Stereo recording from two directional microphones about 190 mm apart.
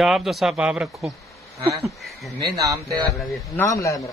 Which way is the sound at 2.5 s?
15° right (ahead or behind).